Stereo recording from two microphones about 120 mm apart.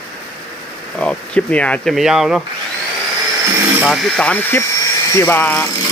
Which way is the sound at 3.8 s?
5° left (ahead or behind).